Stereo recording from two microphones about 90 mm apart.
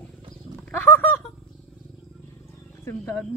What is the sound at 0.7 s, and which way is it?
Roaring cats, 20° left (ahead or behind).